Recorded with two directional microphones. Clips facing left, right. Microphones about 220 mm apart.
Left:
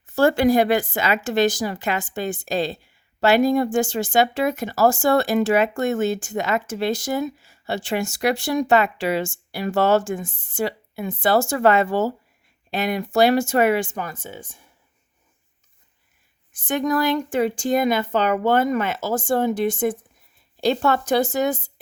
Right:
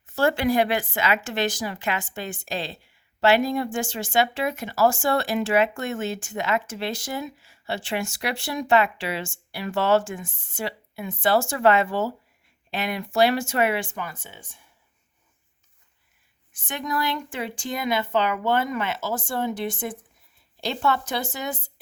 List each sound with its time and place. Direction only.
0.0 s speech: 40° left (ahead or behind)
16.6 s speech: 45° left (ahead or behind)